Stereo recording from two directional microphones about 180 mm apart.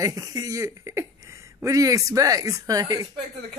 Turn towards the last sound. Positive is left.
turn(degrees=-20)  # may be behind; listen again after turning